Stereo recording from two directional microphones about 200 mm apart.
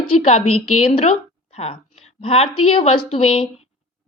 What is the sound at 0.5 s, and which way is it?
Speech, 90° left.